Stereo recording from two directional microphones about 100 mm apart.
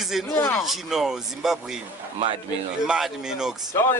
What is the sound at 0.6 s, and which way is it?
A man's voice, 5° right (ahead or behind).